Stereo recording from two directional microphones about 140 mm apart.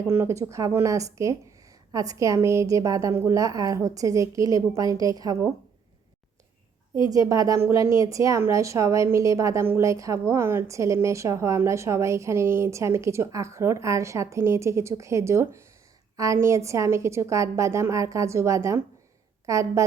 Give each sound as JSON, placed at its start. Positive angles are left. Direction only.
{"t": 0.1, "sound": "speech", "side_deg": -20}
{"t": 7.1, "sound": "speech", "side_deg": -25}